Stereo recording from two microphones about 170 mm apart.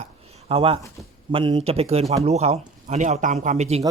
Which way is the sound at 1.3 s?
30° right (ahead or behind).